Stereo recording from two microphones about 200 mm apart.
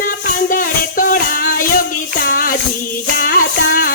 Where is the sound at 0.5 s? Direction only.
40° left (ahead or behind).